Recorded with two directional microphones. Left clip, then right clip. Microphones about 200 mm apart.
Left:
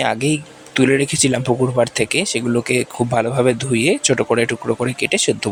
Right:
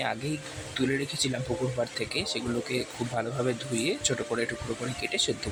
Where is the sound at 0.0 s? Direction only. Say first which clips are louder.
Left 13 dB; 40° left (ahead or behind).